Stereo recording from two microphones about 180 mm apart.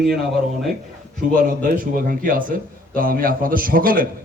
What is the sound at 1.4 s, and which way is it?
A man's voice, 50° right (ahead or behind).